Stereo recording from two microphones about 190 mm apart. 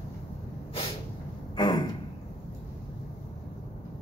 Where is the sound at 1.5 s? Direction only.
20° left (ahead or behind).